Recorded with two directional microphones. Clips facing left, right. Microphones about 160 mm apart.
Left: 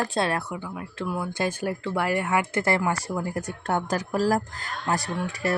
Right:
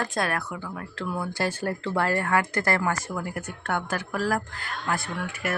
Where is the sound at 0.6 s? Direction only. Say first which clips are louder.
Left 1 dB; 15° left (ahead or behind).